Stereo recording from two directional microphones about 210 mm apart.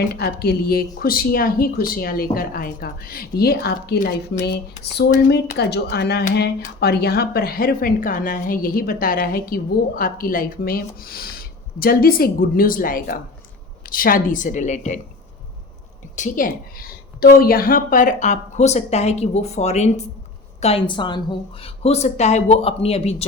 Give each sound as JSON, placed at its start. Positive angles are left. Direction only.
{"t": 0.2, "sound": "a woman's voice", "side_deg": 50}
{"t": 16.1, "sound": "a woman's voice", "side_deg": 40}